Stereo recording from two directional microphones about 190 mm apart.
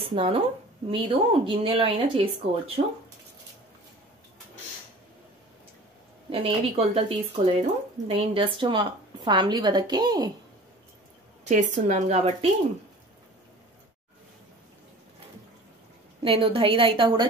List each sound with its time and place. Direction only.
0.0 s speech: 30° right (ahead or behind)
6.3 s speech: 30° right (ahead or behind)
11.4 s speech: 40° right (ahead or behind)
16.2 s speech: 30° right (ahead or behind)